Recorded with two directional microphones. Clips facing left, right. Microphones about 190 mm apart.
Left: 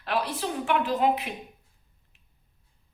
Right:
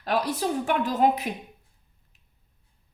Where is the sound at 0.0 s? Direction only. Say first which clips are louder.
Right 3 dB; 40° right (ahead or behind).